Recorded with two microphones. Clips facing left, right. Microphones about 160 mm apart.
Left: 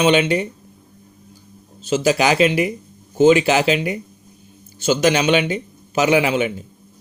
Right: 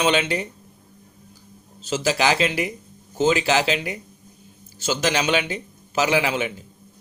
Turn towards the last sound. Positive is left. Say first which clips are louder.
# left 5 dB
turn(degrees=20)  # may be behind; listen again after turning